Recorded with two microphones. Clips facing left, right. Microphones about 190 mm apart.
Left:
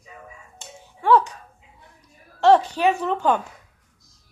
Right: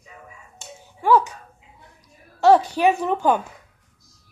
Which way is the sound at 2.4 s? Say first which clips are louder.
Right 1 dB; 10° right (ahead or behind).